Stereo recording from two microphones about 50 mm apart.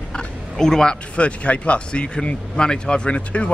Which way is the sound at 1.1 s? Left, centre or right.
Left.